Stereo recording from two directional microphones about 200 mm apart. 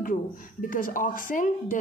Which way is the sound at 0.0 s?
40° left (ahead or behind).